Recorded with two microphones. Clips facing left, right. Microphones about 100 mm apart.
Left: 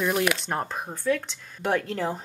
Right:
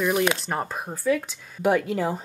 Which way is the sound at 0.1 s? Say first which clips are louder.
Right 2 dB; 20° right (ahead or behind).